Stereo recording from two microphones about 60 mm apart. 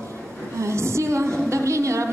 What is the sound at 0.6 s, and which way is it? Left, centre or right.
A woman's voice, right.